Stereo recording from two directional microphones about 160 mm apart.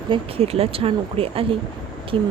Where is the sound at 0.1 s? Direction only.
40° right (ahead or behind).